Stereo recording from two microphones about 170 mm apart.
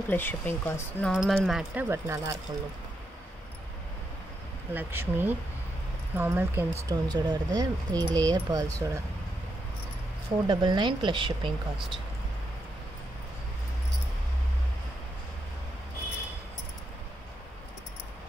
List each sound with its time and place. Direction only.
0.1 s speech: 10° left (ahead or behind)
1.1 s speech: centre (ahead or behind); by 2.3 s 20° right (ahead or behind)
4.7 s speech: 10° right (ahead or behind)
10.4 s speech: 25° right (ahead or behind)